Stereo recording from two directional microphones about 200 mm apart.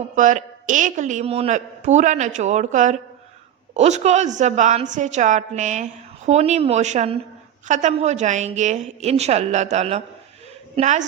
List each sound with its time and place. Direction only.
0.2 s a woman's voice: 40° right (ahead or behind)